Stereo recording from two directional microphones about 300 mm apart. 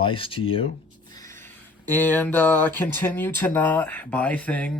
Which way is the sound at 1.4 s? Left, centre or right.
Centre.